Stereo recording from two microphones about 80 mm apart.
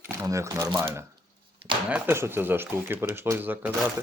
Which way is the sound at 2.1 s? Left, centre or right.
Right.